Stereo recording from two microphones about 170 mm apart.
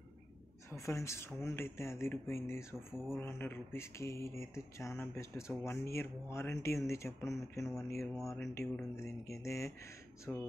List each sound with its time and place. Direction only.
0.7 s speech: 20° left (ahead or behind)